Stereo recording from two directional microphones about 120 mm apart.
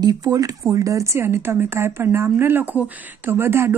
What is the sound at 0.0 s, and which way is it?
A woman's voice, 30° right (ahead or behind).